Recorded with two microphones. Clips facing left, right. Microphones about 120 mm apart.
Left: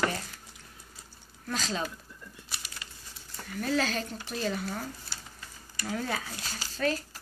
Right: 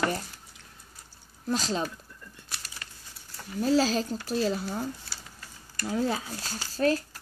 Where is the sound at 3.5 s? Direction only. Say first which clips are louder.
Right 5 dB; 30° right (ahead or behind).